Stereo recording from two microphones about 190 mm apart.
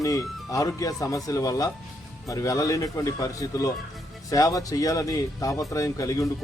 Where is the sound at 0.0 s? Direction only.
15° left (ahead or behind).